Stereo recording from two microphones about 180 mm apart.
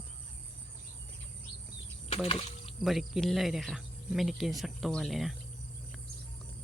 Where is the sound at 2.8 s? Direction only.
Centre (ahead or behind).